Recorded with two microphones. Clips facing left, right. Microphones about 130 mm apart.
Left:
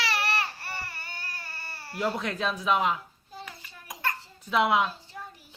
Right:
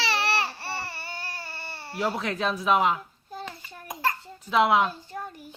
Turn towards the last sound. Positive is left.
turn(degrees=-50)  # may be behind; listen again after turning